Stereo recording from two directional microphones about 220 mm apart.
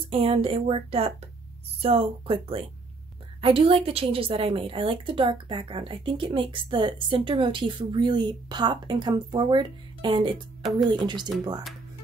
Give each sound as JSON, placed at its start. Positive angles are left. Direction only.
{"t": 0.1, "sound": "a woman's voice", "side_deg": -25}
{"t": 10.6, "sound": "speech", "side_deg": 0}
{"t": 10.9, "sound": "a woman's voice", "side_deg": -20}